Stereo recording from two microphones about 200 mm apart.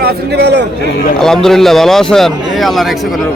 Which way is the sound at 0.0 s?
55° right (ahead or behind).